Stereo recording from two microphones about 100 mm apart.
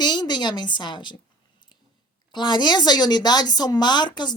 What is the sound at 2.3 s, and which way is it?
Speech, 50° left (ahead or behind).